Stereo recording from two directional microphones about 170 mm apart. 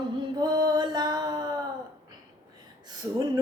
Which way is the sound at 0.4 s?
25° right (ahead or behind).